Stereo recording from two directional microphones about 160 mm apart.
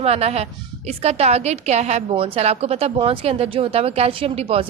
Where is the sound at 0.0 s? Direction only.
40° right (ahead or behind).